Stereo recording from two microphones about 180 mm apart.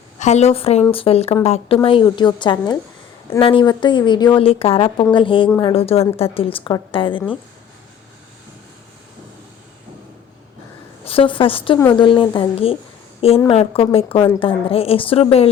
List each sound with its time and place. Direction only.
0.2 s a woman's voice: 40° left (ahead or behind); by 5.7 s 20° left (ahead or behind)
5.7 s a woman's voice: 35° left (ahead or behind)
11.0 s a woman's voice: 30° left (ahead or behind)